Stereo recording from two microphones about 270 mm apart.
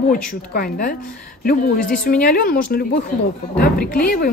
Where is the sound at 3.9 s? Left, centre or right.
Left.